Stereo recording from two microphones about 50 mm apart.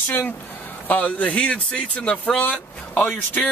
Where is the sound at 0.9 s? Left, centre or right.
Left.